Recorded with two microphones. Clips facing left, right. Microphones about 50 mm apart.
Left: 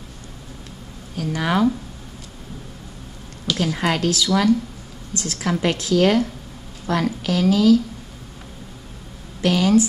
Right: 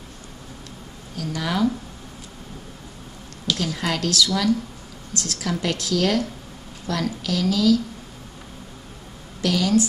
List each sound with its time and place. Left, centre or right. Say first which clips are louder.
1.1 s speech: left 4 dB; left
3.5 s a woman's voice: left 6 dB; left
9.4 s a woman's voice: left 4 dB; left